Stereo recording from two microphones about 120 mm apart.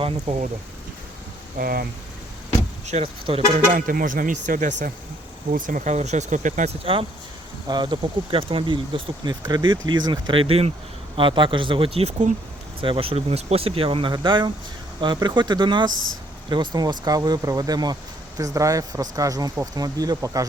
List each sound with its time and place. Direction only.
0.0 s speech: 55° right (ahead or behind)
2.8 s speech: 65° right (ahead or behind)
3.3 s speech: 50° right (ahead or behind)
3.7 s speech: 90° right
6.9 s speech: 50° right (ahead or behind)
7.7 s speech: 40° right (ahead or behind); by 12.3 s 60° right (ahead or behind)
12.8 s speech: 50° right (ahead or behind); by 20.4 s 30° right (ahead or behind)